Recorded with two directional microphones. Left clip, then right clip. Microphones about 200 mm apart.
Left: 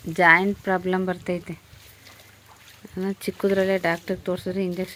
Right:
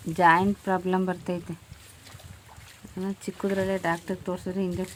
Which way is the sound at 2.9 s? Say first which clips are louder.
Left 6 dB; 10° left (ahead or behind).